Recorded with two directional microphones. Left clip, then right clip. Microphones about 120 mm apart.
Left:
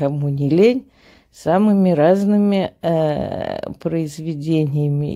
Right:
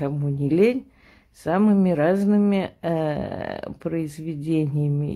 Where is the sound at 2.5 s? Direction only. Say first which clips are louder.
Left 6 dB; 35° left (ahead or behind).